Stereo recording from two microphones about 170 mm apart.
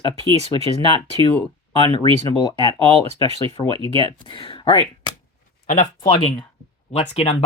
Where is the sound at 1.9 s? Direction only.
30° left (ahead or behind).